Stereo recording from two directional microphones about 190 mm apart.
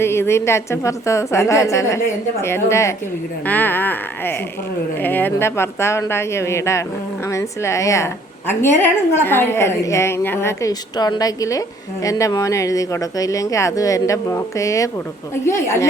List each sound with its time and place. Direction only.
0.0 s a woman's voice: 15° left (ahead or behind)